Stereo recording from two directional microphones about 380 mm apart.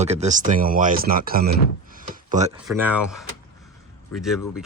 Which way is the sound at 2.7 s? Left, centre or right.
Centre.